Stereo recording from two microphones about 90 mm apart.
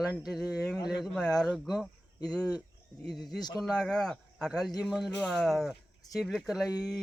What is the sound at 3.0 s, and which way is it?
Speech, centre (ahead or behind).